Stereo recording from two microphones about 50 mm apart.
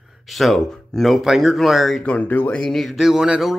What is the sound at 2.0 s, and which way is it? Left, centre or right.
Speech, left.